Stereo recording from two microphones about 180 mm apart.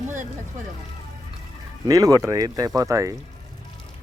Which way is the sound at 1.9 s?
20° right (ahead or behind).